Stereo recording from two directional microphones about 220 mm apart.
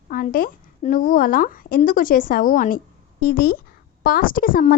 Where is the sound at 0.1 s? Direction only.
40° left (ahead or behind).